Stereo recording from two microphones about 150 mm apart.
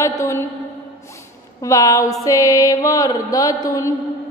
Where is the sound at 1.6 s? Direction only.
20° left (ahead or behind).